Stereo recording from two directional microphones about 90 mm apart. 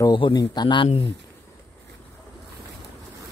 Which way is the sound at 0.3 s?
50° left (ahead or behind).